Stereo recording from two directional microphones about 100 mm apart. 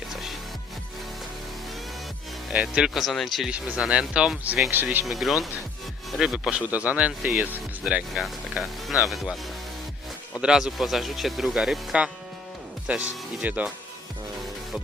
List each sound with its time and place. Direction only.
0.1 s music: 5° right (ahead or behind)
2.5 s speech: 10° right (ahead or behind)
3.5 s speech: 10° right (ahead or behind)
5.0 s speech: centre (ahead or behind)
10.4 s speech: 5° right (ahead or behind)